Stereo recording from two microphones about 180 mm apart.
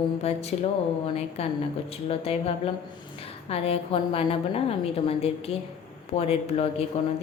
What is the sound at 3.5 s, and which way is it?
A woman's voice, 35° left (ahead or behind).